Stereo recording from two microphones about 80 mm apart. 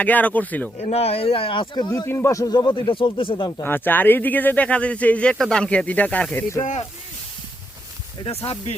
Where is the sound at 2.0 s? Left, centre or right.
Left.